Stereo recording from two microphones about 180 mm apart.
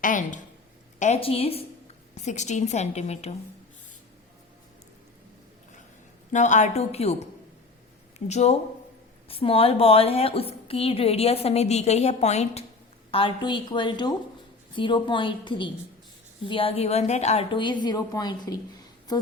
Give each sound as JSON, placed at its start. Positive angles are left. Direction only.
{"t": 0.0, "sound": "a woman's voice", "side_deg": 45}
{"t": 6.3, "sound": "a woman's voice", "side_deg": 40}
{"t": 8.3, "sound": "a woman's voice", "side_deg": 35}